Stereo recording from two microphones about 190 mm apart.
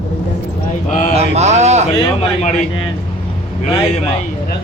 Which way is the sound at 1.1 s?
35° right (ahead or behind).